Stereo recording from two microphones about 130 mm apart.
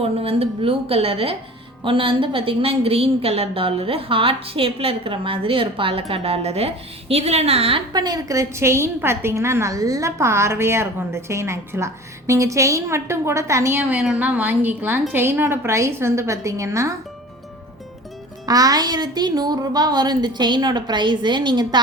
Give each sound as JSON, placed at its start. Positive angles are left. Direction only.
{"t": 0.0, "sound": "a woman's voice", "side_deg": -50}
{"t": 7.9, "sound": "a woman's voice", "side_deg": -30}
{"t": 18.4, "sound": "a woman's voice", "side_deg": -30}